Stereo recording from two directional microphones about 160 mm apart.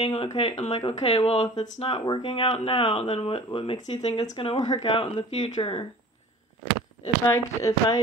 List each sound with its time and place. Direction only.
0.0 s speech: 35° left (ahead or behind)
1.9 s speech: 30° left (ahead or behind)
7.2 s speech: 15° left (ahead or behind)